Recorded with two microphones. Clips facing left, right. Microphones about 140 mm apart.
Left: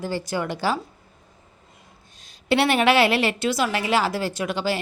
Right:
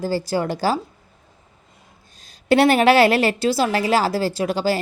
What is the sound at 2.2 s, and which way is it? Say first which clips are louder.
A woman's voice: right 5 dB; 40° right (ahead or behind).